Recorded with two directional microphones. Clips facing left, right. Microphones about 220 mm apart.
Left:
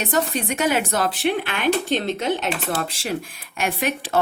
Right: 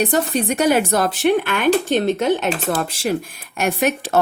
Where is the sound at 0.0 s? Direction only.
35° right (ahead or behind).